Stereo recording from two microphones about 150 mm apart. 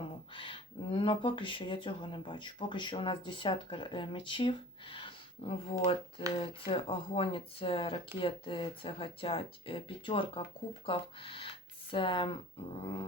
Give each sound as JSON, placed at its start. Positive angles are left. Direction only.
{"t": 0.3, "sound": "speech", "side_deg": 35}